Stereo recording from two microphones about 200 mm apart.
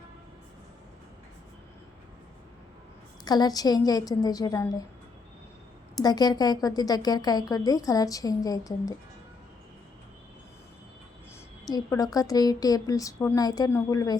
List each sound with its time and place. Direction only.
3.2 s a woman's voice: 20° left (ahead or behind)
6.0 s a woman's voice: 20° left (ahead or behind)
11.6 s speech: 20° left (ahead or behind)